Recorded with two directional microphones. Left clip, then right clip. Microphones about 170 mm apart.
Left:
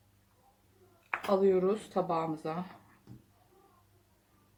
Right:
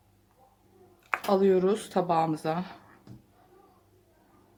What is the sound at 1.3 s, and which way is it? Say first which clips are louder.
Speech: right 4 dB; 35° right (ahead or behind).